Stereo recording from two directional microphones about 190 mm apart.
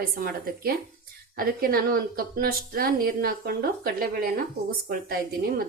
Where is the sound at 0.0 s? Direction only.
50° right (ahead or behind).